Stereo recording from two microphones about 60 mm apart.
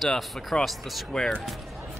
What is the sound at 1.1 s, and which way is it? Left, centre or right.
Speech, centre.